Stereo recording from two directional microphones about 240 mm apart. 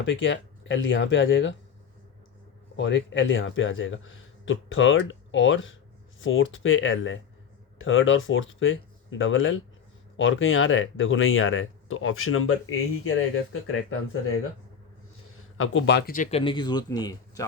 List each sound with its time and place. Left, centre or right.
0.0 s speech: left
2.7 s speech: left
15.5 s speech: left; by 17.4 s centre